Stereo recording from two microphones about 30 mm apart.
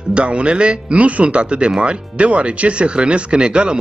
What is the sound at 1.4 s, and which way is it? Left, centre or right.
Speech, right.